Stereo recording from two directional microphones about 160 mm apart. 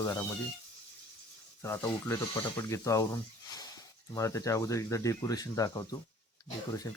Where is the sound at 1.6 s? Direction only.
15° left (ahead or behind).